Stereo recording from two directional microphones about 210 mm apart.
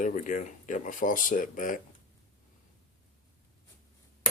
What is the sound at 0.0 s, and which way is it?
Speech, 35° left (ahead or behind).